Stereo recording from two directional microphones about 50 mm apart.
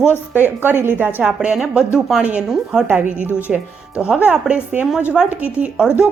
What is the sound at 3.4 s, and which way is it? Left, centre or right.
Speech, right.